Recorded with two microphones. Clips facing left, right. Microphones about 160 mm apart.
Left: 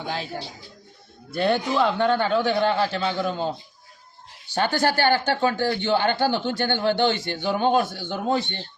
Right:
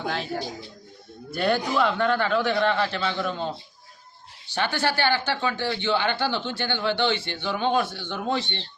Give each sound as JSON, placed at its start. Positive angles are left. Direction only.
{"t": 0.1, "sound": "a man's voice", "side_deg": 30}
{"t": 4.5, "sound": "a man's voice", "side_deg": 40}